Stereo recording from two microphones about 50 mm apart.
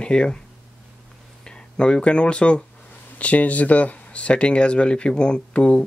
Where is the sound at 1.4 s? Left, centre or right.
Centre.